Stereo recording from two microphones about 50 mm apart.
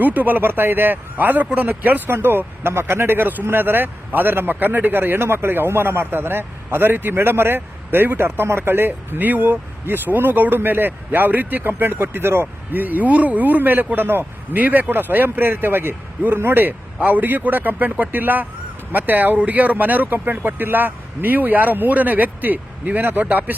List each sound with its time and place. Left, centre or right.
0.0 s speech: right
17.0 s speech: right